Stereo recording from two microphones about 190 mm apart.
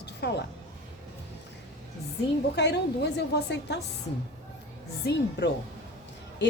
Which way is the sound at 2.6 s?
65° left (ahead or behind).